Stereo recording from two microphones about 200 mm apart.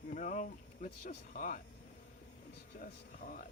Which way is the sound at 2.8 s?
40° left (ahead or behind).